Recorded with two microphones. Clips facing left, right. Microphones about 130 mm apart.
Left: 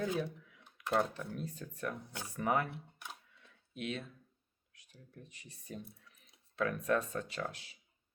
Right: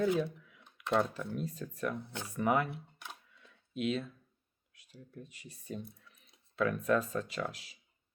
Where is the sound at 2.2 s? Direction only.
35° left (ahead or behind).